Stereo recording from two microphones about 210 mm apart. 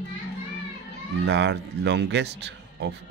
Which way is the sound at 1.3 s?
55° right (ahead or behind).